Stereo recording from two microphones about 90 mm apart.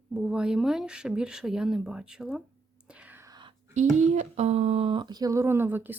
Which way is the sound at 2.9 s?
15° right (ahead or behind).